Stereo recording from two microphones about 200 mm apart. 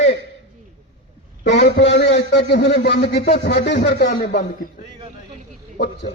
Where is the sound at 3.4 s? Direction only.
55° left (ahead or behind).